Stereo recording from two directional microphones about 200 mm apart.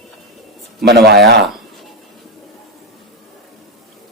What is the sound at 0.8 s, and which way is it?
Speech, 55° right (ahead or behind).